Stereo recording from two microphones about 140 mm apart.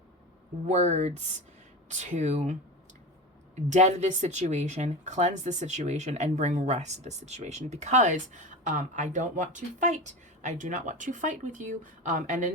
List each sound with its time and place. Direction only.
0.7 s speech: 50° right (ahead or behind)